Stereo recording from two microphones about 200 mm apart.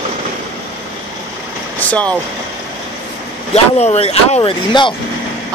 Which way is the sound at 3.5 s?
30° left (ahead or behind).